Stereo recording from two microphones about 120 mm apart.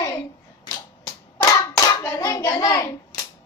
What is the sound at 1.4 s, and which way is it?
Hands, 20° left (ahead or behind).